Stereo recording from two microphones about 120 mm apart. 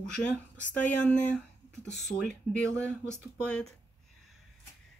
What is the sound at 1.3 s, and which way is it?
Speech, 5° left (ahead or behind).